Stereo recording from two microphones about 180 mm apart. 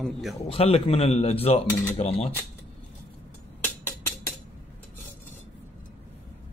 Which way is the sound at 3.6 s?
10° left (ahead or behind).